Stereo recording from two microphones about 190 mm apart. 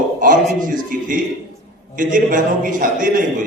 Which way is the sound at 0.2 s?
45° right (ahead or behind).